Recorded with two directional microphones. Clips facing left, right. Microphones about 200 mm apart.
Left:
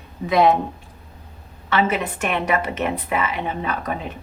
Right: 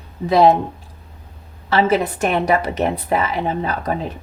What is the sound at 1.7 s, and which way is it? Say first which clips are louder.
A woman's voice: right 4 dB; 35° right (ahead or behind).